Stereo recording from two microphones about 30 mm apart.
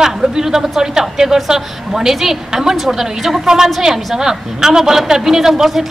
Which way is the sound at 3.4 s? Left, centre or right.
Right.